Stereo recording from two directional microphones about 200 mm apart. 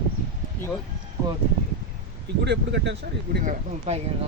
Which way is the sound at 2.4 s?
60° right (ahead or behind).